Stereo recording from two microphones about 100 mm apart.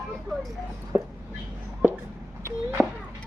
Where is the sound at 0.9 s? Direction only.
20° right (ahead or behind).